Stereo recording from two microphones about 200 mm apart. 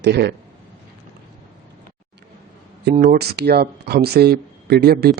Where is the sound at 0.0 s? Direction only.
55° right (ahead or behind).